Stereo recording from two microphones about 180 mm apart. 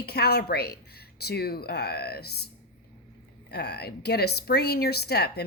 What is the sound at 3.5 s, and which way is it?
Speech, 65° left (ahead or behind).